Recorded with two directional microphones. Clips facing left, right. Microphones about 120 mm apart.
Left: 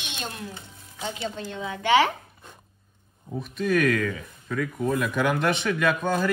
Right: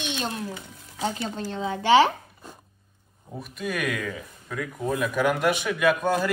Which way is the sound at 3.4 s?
5° right (ahead or behind).